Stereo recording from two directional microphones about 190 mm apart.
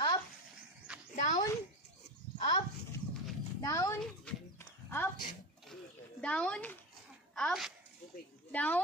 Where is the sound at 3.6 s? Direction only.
15° left (ahead or behind).